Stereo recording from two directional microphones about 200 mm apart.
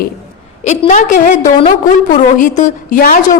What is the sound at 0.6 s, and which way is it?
A woman's voice, 35° left (ahead or behind).